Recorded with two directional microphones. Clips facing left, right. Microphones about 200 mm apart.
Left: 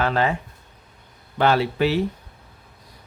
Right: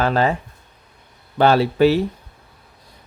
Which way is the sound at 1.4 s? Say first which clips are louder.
Right 5 dB; 35° right (ahead or behind).